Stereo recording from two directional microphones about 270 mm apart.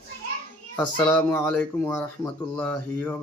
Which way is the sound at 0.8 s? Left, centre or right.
Centre.